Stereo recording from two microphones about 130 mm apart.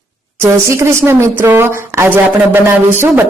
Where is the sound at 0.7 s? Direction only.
20° right (ahead or behind).